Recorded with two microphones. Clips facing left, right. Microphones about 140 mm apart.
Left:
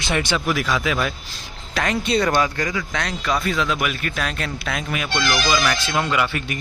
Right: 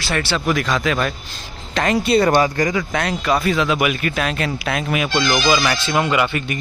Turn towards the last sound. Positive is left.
turn(degrees=0)  # may be behind; listen again after turning